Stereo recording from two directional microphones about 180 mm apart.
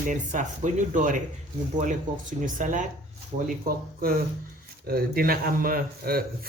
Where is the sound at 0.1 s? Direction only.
45° right (ahead or behind).